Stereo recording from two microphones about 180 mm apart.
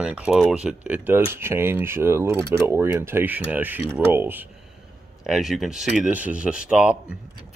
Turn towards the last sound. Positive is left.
turn(degrees=-5)  # may be behind; listen again after turning